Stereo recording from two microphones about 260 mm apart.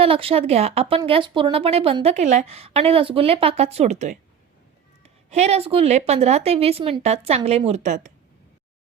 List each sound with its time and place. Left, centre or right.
0.0 s speech: right